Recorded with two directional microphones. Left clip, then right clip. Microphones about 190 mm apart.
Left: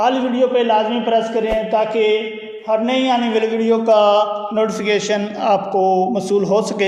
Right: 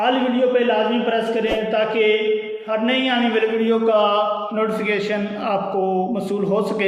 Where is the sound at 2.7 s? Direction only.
35° left (ahead or behind).